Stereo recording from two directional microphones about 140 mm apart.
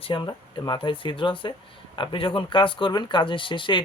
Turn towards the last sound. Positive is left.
turn(degrees=35)  # may be behind; listen again after turning